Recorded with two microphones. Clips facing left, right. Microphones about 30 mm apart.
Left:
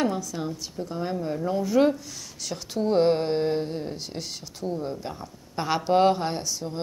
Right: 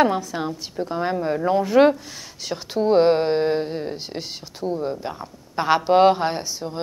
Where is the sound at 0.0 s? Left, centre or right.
Right.